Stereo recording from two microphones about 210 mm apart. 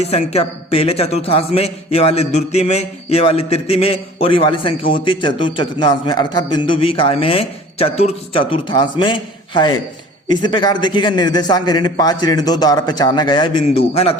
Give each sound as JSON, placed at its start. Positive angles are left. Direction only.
{"t": 0.0, "sound": "a man's voice", "side_deg": 30}